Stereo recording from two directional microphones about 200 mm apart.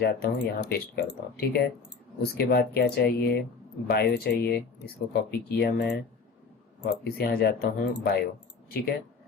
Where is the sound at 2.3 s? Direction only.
55° left (ahead or behind).